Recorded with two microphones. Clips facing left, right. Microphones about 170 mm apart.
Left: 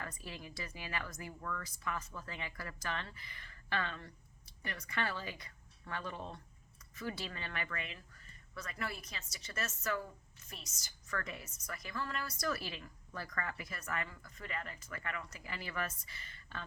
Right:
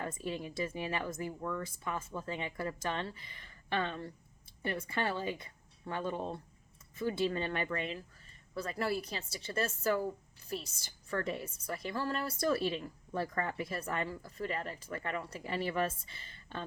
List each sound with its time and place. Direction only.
0.0 s a woman's voice: 25° right (ahead or behind)